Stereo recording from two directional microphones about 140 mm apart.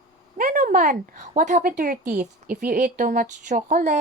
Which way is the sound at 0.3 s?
70° right (ahead or behind).